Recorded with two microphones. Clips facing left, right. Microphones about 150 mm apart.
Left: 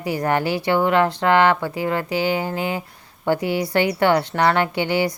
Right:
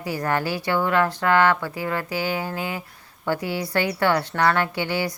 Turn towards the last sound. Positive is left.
turn(degrees=20)  # may be behind; listen again after turning